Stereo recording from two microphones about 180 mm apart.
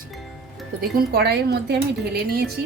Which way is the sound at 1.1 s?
60° right (ahead or behind).